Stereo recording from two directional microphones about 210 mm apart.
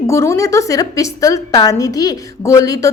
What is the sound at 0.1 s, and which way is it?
A woman's voice, 15° left (ahead or behind).